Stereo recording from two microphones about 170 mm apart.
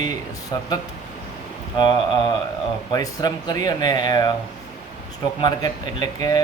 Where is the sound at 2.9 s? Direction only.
20° left (ahead or behind).